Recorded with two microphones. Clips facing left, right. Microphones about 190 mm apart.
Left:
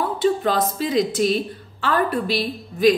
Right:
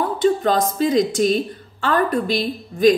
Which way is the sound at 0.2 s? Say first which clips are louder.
Right 2 dB; 5° left (ahead or behind).